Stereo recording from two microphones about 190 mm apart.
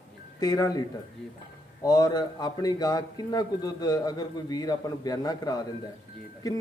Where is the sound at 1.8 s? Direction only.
20° left (ahead or behind).